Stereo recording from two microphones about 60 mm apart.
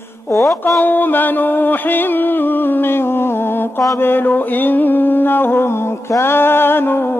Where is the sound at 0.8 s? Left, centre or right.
Left.